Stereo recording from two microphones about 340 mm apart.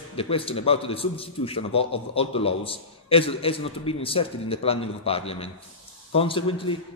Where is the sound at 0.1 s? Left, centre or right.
Centre.